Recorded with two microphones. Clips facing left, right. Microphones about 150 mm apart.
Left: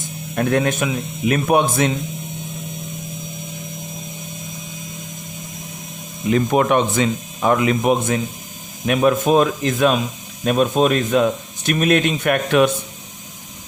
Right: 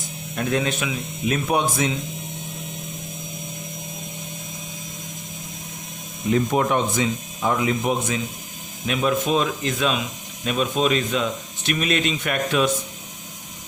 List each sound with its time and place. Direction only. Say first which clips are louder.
0.3 s speech: left 5 dB; 55° left (ahead or behind)
6.3 s speech: left 4 dB; 75° left (ahead or behind)